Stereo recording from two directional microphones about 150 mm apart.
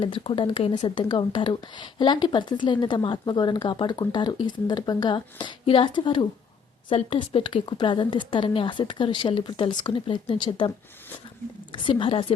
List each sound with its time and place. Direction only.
0.0 s speech: 35° left (ahead or behind)
11.7 s speech: 35° left (ahead or behind)